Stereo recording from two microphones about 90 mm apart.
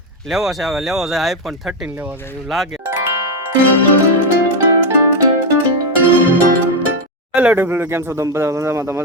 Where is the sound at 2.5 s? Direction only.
Centre (ahead or behind).